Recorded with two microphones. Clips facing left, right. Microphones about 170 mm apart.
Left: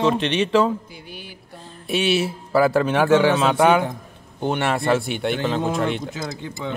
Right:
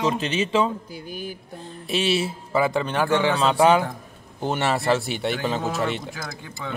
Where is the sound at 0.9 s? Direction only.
45° right (ahead or behind).